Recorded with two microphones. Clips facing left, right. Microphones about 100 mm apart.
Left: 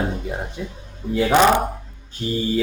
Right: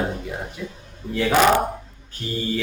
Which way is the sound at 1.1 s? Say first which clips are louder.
Left 3 dB; 15° left (ahead or behind).